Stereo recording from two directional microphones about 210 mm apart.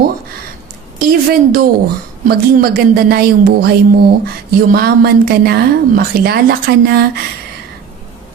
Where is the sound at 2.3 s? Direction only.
45° right (ahead or behind).